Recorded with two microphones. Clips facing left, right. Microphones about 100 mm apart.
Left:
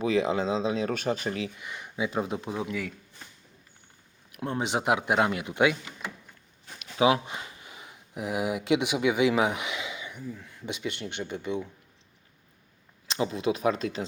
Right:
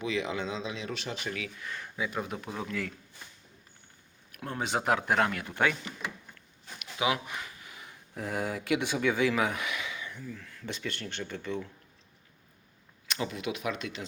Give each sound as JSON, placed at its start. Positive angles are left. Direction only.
{"t": 0.0, "sound": "speech", "side_deg": 35}
{"t": 1.5, "sound": "speech", "side_deg": 15}
{"t": 4.3, "sound": "speech", "side_deg": 20}
{"t": 6.7, "sound": "speech", "side_deg": 30}
{"t": 13.1, "sound": "speech", "side_deg": 25}